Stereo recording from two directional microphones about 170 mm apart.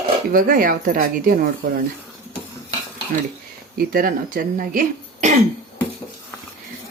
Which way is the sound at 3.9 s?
55° right (ahead or behind).